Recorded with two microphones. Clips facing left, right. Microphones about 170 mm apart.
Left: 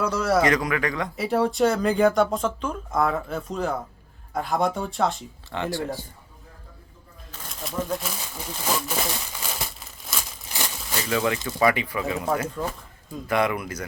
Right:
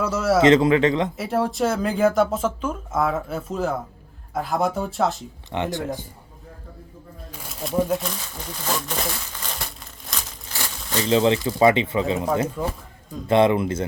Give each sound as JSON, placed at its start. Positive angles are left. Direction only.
{"t": 0.0, "sound": "speech", "side_deg": -5}
{"t": 0.4, "sound": "speech", "side_deg": -25}
{"t": 1.1, "sound": "speech", "side_deg": 0}
{"t": 5.5, "sound": "speech", "side_deg": -20}
{"t": 7.3, "sound": "pigeon", "side_deg": -10}
{"t": 7.8, "sound": "speech", "side_deg": -10}
{"t": 8.6, "sound": "crumpling", "side_deg": 10}
{"t": 10.5, "sound": "crumpling", "side_deg": 15}
{"t": 11.1, "sound": "speech", "side_deg": -25}
{"t": 12.6, "sound": "speech", "side_deg": -10}
{"t": 13.2, "sound": "speech", "side_deg": -25}